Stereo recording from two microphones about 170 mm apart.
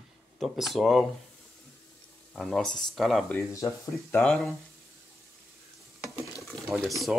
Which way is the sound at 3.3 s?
20° left (ahead or behind).